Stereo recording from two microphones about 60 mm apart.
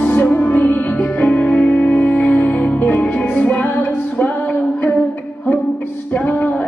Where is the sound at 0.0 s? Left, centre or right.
Left.